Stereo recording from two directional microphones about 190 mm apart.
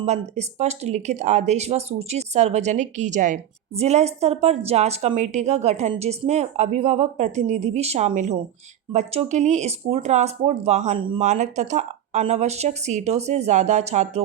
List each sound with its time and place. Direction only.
0.0 s speech: 35° right (ahead or behind)
11.2 s speech: 40° right (ahead or behind)